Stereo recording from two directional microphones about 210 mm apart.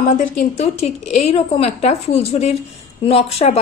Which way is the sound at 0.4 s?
35° left (ahead or behind).